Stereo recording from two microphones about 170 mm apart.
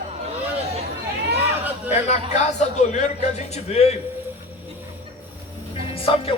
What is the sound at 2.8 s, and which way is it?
A man's voice, 45° left (ahead or behind).